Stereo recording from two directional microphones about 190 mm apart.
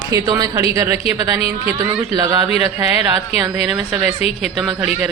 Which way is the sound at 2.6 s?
10° right (ahead or behind).